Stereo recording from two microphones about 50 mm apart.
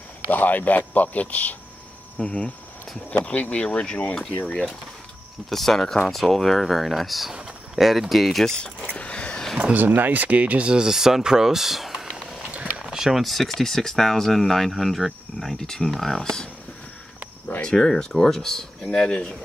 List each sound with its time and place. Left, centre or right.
0.3 s a man's voice: left; by 4.0 s centre
5.5 s speech: centre
8.5 s speech: centre
8.9 s a sound: left
9.6 s speech: right; by 15.0 s centre
15.5 s speech: centre
17.7 s speech: centre